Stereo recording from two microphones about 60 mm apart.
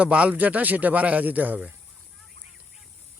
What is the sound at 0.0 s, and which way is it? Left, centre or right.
Speech, right.